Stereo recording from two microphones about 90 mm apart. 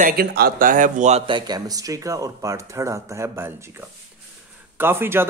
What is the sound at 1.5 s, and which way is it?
Speech, 45° right (ahead or behind).